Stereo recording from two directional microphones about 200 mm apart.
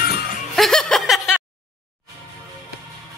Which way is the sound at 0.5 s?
Centre (ahead or behind).